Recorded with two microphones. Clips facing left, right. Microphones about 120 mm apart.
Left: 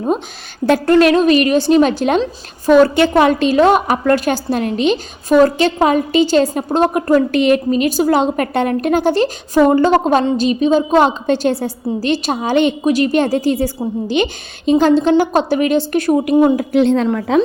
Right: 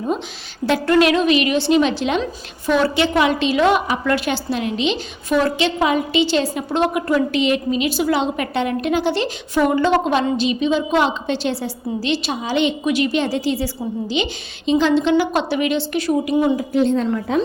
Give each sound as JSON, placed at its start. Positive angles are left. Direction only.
{"t": 0.9, "sound": "a woman's voice", "side_deg": 40}
{"t": 16.7, "sound": "a woman's voice", "side_deg": 80}